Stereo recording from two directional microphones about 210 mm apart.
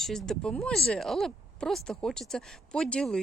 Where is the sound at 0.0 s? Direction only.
Centre (ahead or behind).